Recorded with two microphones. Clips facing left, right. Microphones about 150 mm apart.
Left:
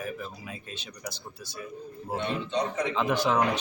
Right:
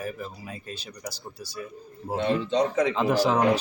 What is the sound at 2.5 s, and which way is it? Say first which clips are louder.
Speech: right 5 dB; 90° right.